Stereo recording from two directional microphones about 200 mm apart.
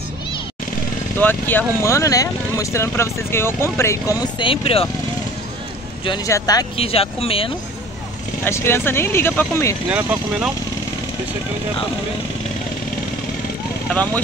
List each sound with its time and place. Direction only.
1.2 s speech: 10° left (ahead or behind); by 4.8 s 25° left (ahead or behind)
6.0 s speech: 20° left (ahead or behind)
6.8 s speech: 30° left (ahead or behind)
8.5 s speech: 10° left (ahead or behind)
9.8 s speech: 5° right (ahead or behind)
13.8 s speech: 5° left (ahead or behind)